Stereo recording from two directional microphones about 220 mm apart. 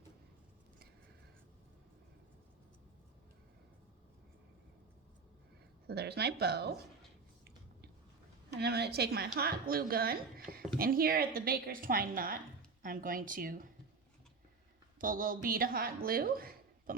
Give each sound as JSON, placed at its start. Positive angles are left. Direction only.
{"t": 5.9, "sound": "a woman's voice", "side_deg": -45}
{"t": 8.5, "sound": "a woman's voice", "side_deg": -45}
{"t": 14.9, "sound": "a woman's voice", "side_deg": -40}